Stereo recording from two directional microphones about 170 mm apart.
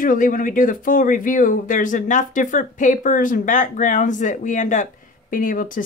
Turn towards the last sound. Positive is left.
turn(degrees=50)  # may be behind; listen again after turning